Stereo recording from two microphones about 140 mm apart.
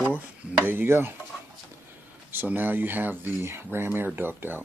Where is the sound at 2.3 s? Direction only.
15° right (ahead or behind).